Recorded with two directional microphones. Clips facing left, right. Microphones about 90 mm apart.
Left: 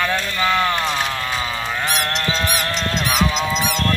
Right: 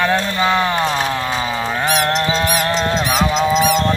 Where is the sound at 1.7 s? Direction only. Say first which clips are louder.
Right 7 dB; 40° right (ahead or behind).